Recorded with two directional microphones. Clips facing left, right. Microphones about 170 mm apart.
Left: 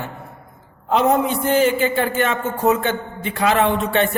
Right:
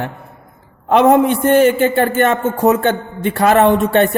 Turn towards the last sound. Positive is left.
turn(degrees=-55)  # may be behind; listen again after turning